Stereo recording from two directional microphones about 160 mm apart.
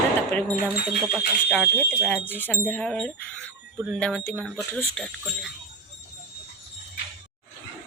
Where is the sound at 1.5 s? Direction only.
5° right (ahead or behind).